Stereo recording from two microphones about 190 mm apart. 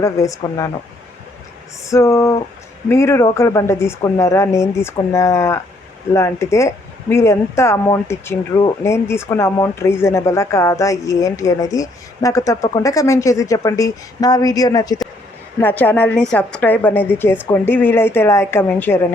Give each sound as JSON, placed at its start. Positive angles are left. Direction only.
{"t": 0.0, "sound": "speech", "side_deg": 15}
{"t": 1.8, "sound": "speech", "side_deg": 15}
{"t": 15.6, "sound": "speech", "side_deg": 10}